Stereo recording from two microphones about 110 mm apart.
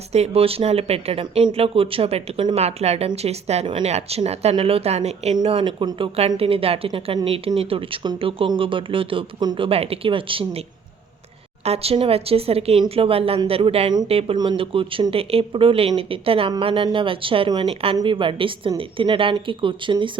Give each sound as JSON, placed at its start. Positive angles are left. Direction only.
{"t": 0.1, "sound": "speech", "side_deg": -70}
{"t": 2.6, "sound": "speech", "side_deg": -75}
{"t": 4.5, "sound": "speech", "side_deg": -60}
{"t": 5.4, "sound": "speech", "side_deg": -50}
{"t": 6.1, "sound": "speech", "side_deg": -65}
{"t": 9.4, "sound": "speech", "side_deg": -40}
{"t": 9.6, "sound": "speech", "side_deg": -60}
{"t": 11.6, "sound": "speech", "side_deg": -65}
{"t": 17.9, "sound": "speech", "side_deg": -50}